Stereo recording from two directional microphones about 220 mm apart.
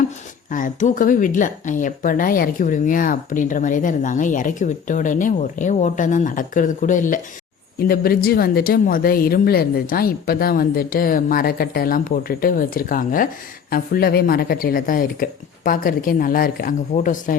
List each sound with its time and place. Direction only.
0.5 s speech: 35° left (ahead or behind)